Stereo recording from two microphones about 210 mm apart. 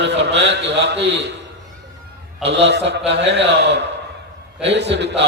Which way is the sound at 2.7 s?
55° right (ahead or behind).